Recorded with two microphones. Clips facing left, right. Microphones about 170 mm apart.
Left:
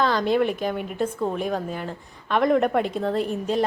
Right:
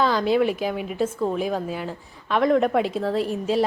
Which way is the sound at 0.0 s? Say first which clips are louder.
Right 1 dB; 5° right (ahead or behind).